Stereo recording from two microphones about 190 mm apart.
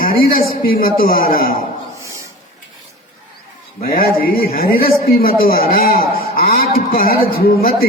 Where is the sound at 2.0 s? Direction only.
15° right (ahead or behind).